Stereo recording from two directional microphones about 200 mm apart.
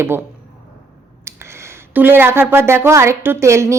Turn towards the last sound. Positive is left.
turn(degrees=-15)  # may be behind; listen again after turning